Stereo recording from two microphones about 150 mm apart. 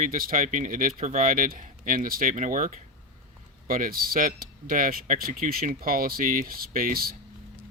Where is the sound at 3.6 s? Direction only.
70° right (ahead or behind).